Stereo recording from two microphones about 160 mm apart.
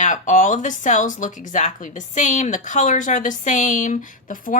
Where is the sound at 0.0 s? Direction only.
50° left (ahead or behind).